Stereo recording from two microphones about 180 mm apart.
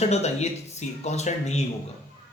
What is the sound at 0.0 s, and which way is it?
A man's voice, 35° left (ahead or behind).